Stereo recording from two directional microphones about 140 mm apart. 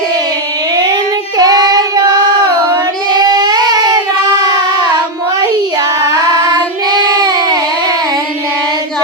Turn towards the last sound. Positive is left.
turn(degrees=-30)  # may be behind; listen again after turning